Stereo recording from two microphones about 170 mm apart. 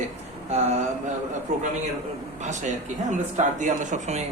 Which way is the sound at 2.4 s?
45° right (ahead or behind).